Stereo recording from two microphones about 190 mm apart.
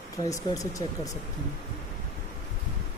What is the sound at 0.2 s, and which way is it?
Speech, 20° left (ahead or behind).